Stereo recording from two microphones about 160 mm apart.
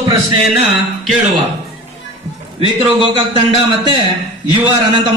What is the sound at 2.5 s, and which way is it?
A man's voice, 35° right (ahead or behind).